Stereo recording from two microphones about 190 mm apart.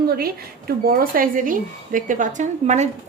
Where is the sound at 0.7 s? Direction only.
50° right (ahead or behind).